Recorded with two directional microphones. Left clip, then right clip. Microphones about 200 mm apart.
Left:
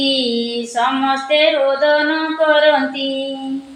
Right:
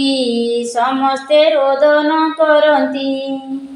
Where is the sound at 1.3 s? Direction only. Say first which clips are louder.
Right 3 dB; 30° right (ahead or behind).